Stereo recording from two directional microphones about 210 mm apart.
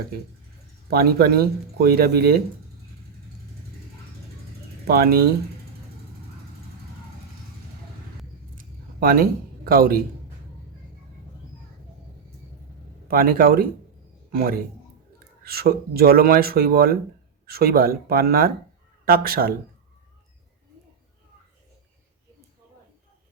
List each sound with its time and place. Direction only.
0.9 s speech: 45° right (ahead or behind)
4.9 s speech: 45° right (ahead or behind)
8.5 s a sound: 45° right (ahead or behind)
13.1 s a man's voice: 45° right (ahead or behind)